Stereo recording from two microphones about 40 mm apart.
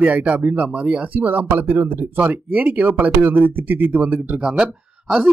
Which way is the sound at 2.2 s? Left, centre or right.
Right.